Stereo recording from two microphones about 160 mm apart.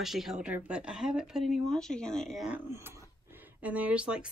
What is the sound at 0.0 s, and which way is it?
Speech, centre (ahead or behind).